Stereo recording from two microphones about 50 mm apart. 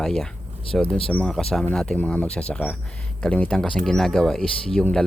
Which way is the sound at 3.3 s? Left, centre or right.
Left.